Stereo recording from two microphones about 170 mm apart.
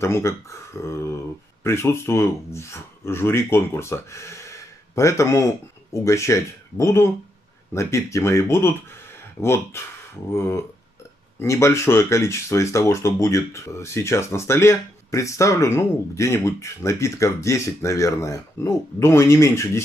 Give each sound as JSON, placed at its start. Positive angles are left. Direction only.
{"t": 0.0, "sound": "speech", "side_deg": 15}
{"t": 9.8, "sound": "speech", "side_deg": 15}